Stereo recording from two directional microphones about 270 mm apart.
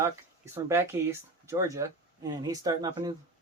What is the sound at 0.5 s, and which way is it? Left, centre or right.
Speech, centre.